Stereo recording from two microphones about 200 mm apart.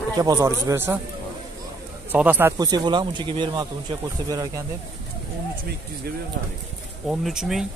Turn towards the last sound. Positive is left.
turn(degrees=0)  # may be behind; listen again after turning